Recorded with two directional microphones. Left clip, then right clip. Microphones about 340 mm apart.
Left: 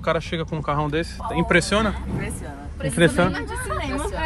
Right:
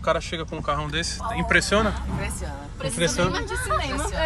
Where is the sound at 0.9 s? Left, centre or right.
Centre.